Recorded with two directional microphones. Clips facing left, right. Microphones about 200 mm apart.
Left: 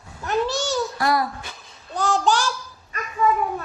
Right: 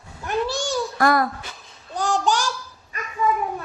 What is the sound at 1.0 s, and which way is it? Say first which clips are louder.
Speech: right 4 dB; 50° right (ahead or behind).